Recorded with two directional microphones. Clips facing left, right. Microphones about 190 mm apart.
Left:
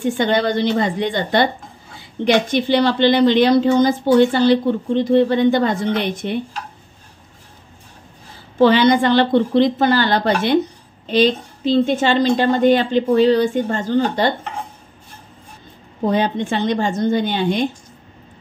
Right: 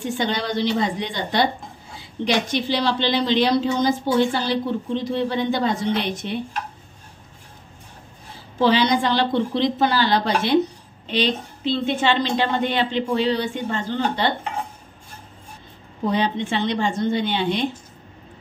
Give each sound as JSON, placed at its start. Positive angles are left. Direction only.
{"t": 0.2, "sound": "a woman's voice", "side_deg": 55}
{"t": 8.5, "sound": "a woman's voice", "side_deg": 55}
{"t": 11.1, "sound": "a woman's voice", "side_deg": 40}
{"t": 16.1, "sound": "a woman's voice", "side_deg": 45}